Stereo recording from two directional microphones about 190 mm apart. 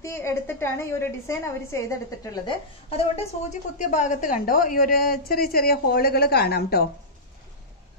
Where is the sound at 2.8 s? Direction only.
30° left (ahead or behind); by 6.8 s 55° left (ahead or behind).